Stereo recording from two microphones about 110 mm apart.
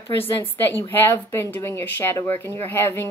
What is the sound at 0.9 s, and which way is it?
A woman's voice, 20° left (ahead or behind).